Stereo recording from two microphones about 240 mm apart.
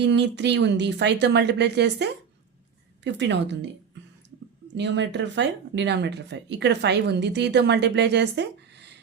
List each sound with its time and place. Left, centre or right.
0.0 s speech: right